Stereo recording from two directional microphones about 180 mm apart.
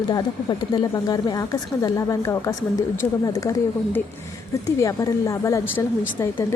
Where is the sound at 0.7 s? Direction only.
20° left (ahead or behind).